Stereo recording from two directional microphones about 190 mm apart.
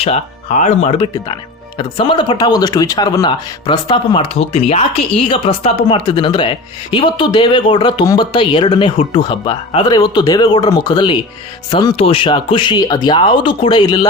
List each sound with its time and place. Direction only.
0.0 s speech: 35° left (ahead or behind)